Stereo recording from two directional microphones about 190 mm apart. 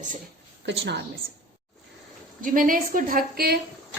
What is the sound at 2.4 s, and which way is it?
A woman's voice, 45° right (ahead or behind).